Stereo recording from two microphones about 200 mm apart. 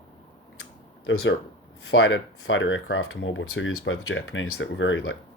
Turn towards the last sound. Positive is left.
turn(degrees=70)  # may be behind; listen again after turning